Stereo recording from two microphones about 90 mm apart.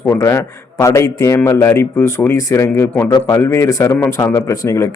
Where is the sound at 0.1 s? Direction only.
30° left (ahead or behind).